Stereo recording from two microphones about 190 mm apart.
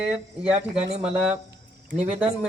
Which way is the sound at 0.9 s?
35° right (ahead or behind).